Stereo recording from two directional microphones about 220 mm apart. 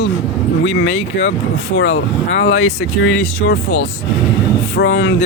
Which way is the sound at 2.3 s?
60° left (ahead or behind).